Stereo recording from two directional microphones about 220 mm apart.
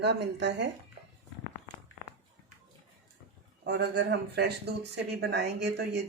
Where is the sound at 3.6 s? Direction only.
50° right (ahead or behind).